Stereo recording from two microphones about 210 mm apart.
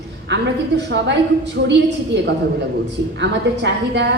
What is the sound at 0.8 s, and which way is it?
Speech, 55° right (ahead or behind).